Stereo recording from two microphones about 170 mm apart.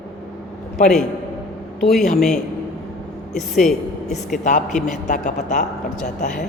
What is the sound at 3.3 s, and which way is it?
Speech, centre (ahead or behind).